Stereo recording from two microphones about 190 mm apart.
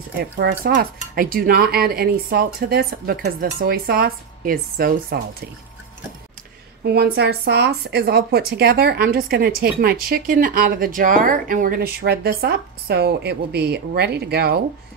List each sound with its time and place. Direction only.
0.2 s speech: 55° right (ahead or behind)
6.8 s speech: 60° right (ahead or behind)